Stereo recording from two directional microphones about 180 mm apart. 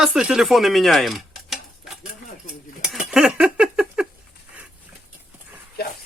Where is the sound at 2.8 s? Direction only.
5° right (ahead or behind).